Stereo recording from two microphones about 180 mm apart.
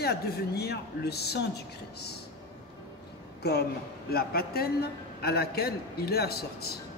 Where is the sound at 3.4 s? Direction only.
65° left (ahead or behind).